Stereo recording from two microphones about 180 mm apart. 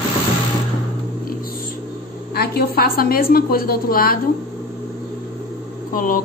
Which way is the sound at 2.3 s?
60° left (ahead or behind).